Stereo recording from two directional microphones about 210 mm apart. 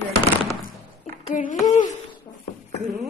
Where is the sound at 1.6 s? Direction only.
35° left (ahead or behind).